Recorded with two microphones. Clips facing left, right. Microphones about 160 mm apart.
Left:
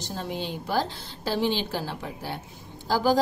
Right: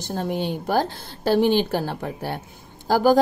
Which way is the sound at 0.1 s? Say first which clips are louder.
Right 7 dB; 55° right (ahead or behind).